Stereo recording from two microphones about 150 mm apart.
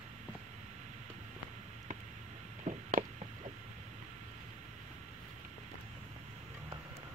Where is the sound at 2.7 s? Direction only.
55° right (ahead or behind).